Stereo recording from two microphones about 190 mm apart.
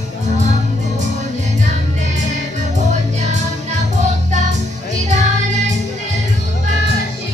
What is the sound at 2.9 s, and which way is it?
Music, 40° right (ahead or behind).